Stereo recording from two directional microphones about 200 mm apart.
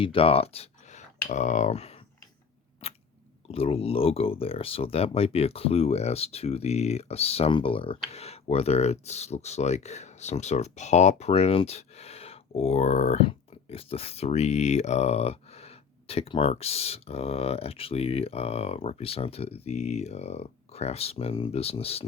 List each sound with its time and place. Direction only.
0.0 s speech: 25° left (ahead or behind)
2.8 s a sound: 30° left (ahead or behind)
3.5 s speech: 30° left (ahead or behind)